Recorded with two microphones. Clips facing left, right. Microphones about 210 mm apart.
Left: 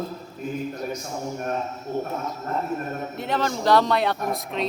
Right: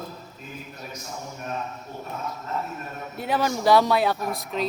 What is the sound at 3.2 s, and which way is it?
Speech, 5° right (ahead or behind).